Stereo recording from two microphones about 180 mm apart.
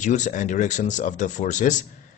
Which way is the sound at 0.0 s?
45° left (ahead or behind).